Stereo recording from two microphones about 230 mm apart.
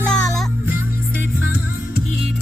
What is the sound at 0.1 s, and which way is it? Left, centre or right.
Music, centre.